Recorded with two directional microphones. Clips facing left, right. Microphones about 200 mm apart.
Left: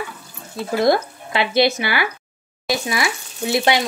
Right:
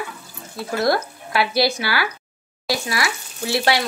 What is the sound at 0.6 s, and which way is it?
Speech, 20° left (ahead or behind).